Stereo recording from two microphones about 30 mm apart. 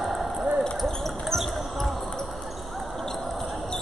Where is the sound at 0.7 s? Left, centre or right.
Centre.